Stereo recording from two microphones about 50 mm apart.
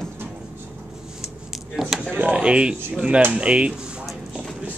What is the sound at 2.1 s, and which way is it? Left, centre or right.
Speech, right.